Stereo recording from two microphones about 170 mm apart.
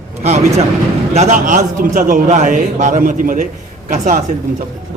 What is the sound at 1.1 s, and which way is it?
A man's voice, 50° right (ahead or behind).